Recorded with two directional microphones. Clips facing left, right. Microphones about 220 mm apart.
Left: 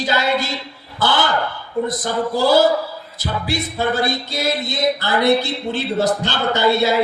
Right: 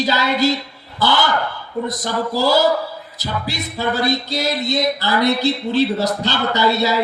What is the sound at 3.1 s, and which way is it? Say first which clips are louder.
Music: left 3 dB; 50° left (ahead or behind).